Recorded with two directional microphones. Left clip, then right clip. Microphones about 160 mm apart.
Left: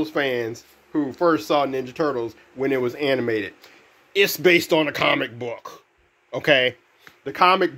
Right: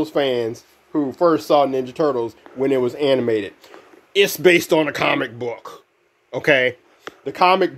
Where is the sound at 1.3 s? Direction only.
20° right (ahead or behind).